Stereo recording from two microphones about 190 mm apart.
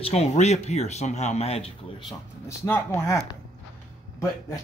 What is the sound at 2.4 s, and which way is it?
Speech, 10° left (ahead or behind).